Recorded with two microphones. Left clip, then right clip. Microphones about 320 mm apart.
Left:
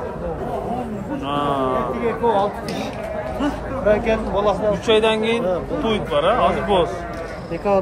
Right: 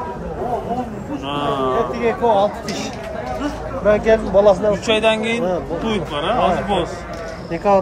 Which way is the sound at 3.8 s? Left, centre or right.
Right.